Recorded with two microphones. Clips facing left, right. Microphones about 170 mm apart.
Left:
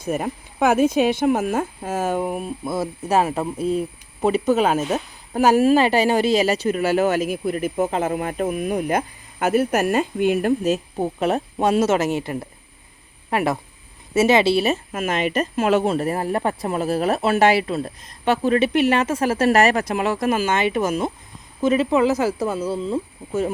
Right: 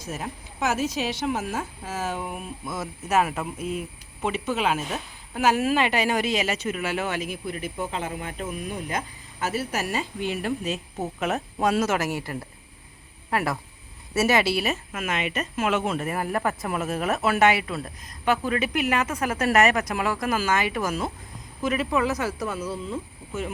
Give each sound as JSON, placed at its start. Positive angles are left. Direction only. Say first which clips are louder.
{"t": 0.0, "sound": "speech", "louder": "left 9 dB", "side_deg": 55}